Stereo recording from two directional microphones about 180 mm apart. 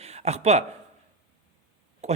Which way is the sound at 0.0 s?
35° right (ahead or behind).